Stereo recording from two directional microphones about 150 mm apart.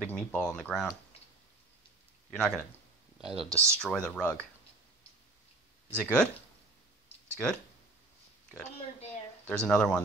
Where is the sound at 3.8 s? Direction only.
5° left (ahead or behind).